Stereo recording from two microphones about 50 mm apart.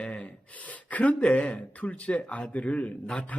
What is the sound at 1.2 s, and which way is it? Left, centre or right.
Speech, left.